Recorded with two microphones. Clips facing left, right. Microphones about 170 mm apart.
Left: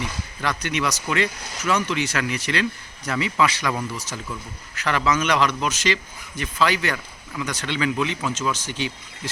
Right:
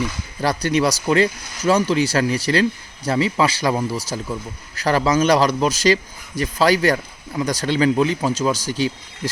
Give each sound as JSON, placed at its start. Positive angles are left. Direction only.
{"t": 0.4, "sound": "speech", "side_deg": -35}